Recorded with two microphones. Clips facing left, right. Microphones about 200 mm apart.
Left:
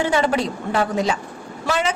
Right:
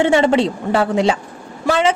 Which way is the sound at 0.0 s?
25° right (ahead or behind).